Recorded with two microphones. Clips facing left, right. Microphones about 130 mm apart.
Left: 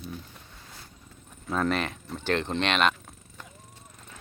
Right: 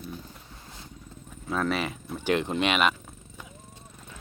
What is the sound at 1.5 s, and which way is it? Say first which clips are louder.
Speech: left 1 dB; 5° right (ahead or behind).